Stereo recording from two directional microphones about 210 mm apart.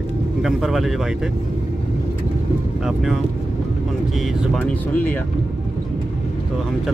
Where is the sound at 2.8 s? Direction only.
5° right (ahead or behind).